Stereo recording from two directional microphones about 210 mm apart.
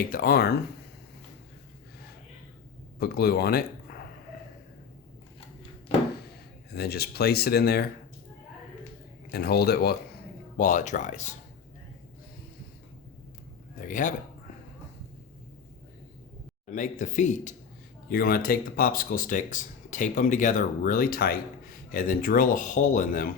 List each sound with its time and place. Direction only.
0.0 s speech: 45° left (ahead or behind)
3.0 s speech: 50° left (ahead or behind)
6.7 s speech: 50° left (ahead or behind)
9.3 s speech: 50° left (ahead or behind)
10.6 s speech: 35° left (ahead or behind)
13.8 s speech: 40° left (ahead or behind)
16.7 s speech: 35° left (ahead or behind)
18.1 s speech: 45° left (ahead or behind)